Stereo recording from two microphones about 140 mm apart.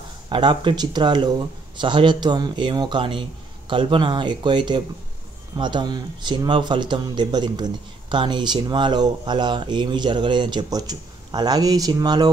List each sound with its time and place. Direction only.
0.3 s speech: 35° right (ahead or behind)